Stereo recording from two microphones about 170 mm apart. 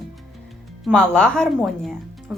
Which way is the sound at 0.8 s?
5° left (ahead or behind).